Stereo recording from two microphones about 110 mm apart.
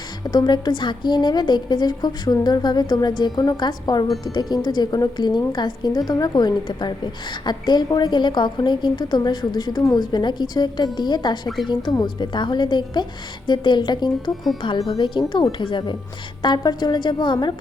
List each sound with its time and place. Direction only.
0.3 s a woman's voice: 40° left (ahead or behind)
11.4 s a woman's voice: centre (ahead or behind)
11.7 s a woman's voice: 40° left (ahead or behind)